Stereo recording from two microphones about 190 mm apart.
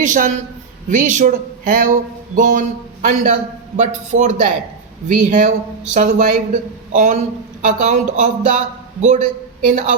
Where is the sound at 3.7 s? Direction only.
40° right (ahead or behind).